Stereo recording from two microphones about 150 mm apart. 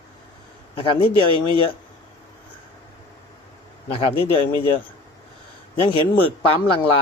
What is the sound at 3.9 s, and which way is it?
Speech, 40° left (ahead or behind).